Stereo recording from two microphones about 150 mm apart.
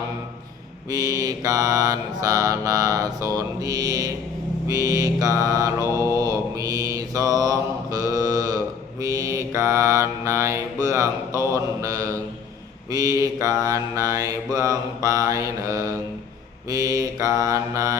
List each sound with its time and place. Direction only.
0.9 s mantra: 25° right (ahead or behind)